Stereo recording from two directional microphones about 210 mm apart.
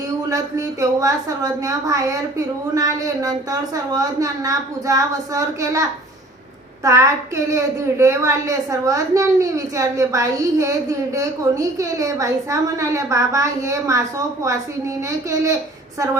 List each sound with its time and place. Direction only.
0.3 s a woman's voice: 15° right (ahead or behind)
6.8 s a woman's voice: 15° right (ahead or behind)